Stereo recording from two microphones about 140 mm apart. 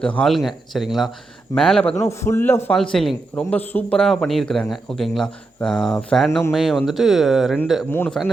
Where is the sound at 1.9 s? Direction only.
20° left (ahead or behind).